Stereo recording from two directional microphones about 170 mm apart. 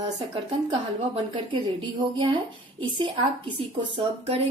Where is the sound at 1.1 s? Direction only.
30° right (ahead or behind).